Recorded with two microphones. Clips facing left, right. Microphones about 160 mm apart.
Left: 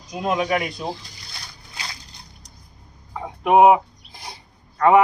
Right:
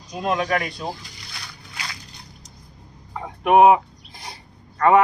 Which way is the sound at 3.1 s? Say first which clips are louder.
Even; 10° left (ahead or behind).